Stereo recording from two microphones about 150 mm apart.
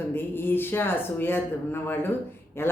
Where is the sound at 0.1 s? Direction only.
15° left (ahead or behind).